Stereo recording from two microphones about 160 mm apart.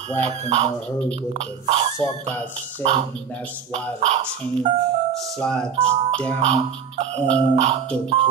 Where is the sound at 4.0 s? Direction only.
40° right (ahead or behind).